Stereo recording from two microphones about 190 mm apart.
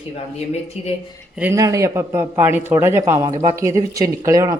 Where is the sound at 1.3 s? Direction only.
10° right (ahead or behind).